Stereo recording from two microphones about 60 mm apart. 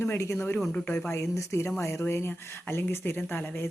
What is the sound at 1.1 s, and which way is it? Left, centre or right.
Speech, left.